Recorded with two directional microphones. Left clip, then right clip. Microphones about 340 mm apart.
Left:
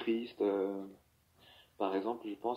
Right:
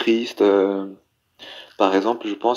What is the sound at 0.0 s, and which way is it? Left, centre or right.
Speech, right.